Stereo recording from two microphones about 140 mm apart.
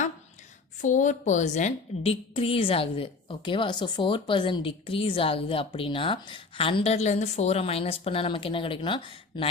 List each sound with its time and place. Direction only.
0.8 s speech: 65° left (ahead or behind)
2.0 s a woman's voice: 40° left (ahead or behind)